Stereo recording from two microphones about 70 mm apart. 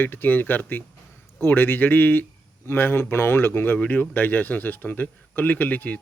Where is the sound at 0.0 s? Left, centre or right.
Left.